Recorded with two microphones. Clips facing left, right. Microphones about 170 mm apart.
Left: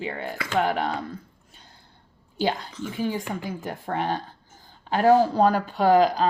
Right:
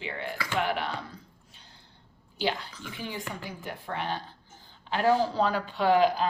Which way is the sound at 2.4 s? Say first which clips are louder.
Left 5 dB; 45° left (ahead or behind).